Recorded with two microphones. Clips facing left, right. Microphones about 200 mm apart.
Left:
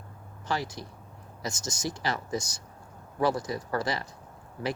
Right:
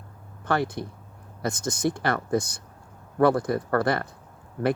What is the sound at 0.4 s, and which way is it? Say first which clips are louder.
Speech: right 7 dB; 55° right (ahead or behind).